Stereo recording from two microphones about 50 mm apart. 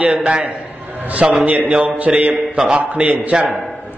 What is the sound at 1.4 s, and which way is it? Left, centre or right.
Speech, right.